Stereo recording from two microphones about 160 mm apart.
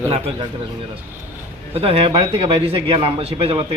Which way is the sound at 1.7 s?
35° right (ahead or behind).